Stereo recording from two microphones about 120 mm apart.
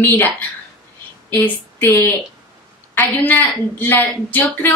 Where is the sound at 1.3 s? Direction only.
15° left (ahead or behind).